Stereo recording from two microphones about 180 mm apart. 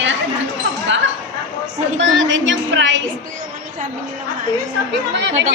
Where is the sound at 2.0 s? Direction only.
90° right.